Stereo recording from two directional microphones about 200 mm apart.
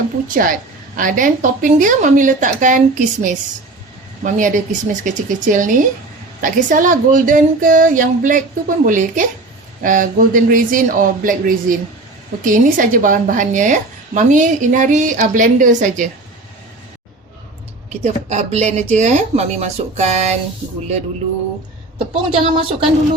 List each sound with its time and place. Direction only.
0.3 s speech: 45° right (ahead or behind)
17.8 s speech: 35° right (ahead or behind)
21.9 s a woman's voice: 25° right (ahead or behind)